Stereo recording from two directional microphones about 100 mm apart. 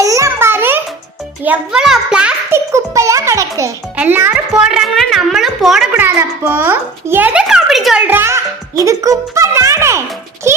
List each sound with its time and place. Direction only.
0.0 s a sound: 30° right (ahead or behind)
1.5 s a child's voice: 5° right (ahead or behind)
2.5 s a child's voice: 30° right (ahead or behind)
3.9 s a child's voice: 20° right (ahead or behind)
4.5 s a sound: 5° right (ahead or behind)
5.9 s speech: 20° right (ahead or behind)
7.4 s speech: 5° right (ahead or behind)
8.0 s speech: 25° right (ahead or behind)